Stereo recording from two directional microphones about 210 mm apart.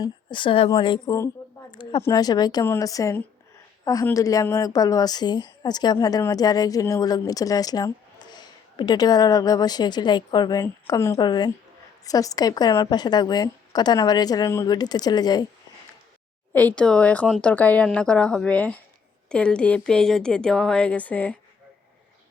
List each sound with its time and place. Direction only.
0.0 s a woman's voice: 25° left (ahead or behind)
16.5 s speech: 5° left (ahead or behind)